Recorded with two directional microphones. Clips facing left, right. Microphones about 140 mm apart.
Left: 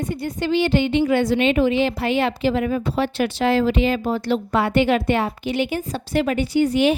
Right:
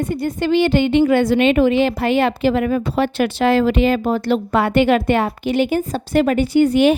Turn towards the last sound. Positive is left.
turn(degrees=-55)  # may be behind; listen again after turning